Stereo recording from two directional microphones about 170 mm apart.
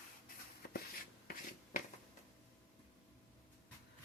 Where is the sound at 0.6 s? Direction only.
65° left (ahead or behind).